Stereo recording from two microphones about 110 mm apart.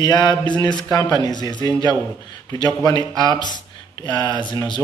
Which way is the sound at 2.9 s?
40° left (ahead or behind).